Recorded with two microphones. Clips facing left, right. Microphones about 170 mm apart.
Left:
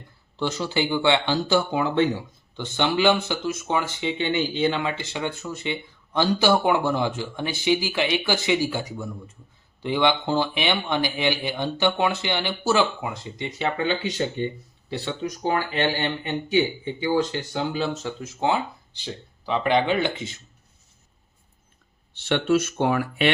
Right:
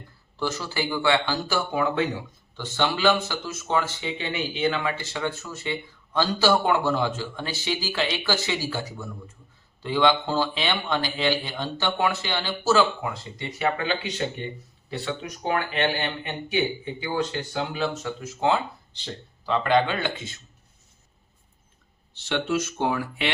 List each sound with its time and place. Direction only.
0.3 s speech: 20° left (ahead or behind)
4.2 s speech: 25° left (ahead or behind)
18.0 s speech: 20° left (ahead or behind)
22.3 s speech: 65° left (ahead or behind)